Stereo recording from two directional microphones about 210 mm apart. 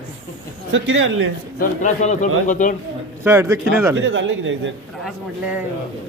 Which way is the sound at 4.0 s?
65° right (ahead or behind).